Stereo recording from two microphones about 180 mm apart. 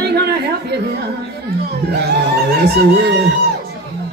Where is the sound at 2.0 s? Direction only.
65° right (ahead or behind).